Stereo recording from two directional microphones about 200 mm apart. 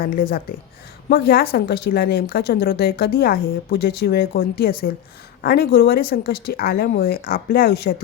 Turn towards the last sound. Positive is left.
turn(degrees=50)  # may be behind; listen again after turning